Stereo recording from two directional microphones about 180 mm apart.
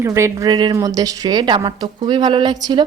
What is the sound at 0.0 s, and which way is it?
Speech, 15° right (ahead or behind).